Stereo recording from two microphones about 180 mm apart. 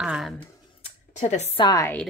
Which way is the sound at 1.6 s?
20° left (ahead or behind).